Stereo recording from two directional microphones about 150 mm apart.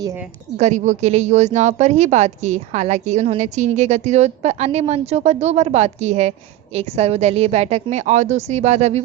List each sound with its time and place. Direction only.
0.5 s a woman's voice: 50° right (ahead or behind)